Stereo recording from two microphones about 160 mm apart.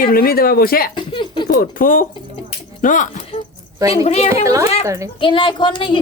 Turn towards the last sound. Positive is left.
turn(degrees=30)  # may be behind; listen again after turning